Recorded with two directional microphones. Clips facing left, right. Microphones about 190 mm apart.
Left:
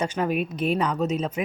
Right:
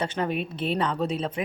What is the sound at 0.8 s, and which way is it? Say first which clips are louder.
Speech: left 1 dB; 5° left (ahead or behind).